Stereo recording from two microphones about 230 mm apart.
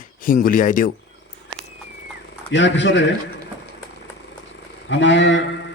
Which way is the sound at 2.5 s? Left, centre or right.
Left.